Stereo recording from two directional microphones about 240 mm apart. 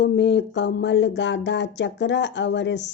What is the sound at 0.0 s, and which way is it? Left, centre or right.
Speech, left.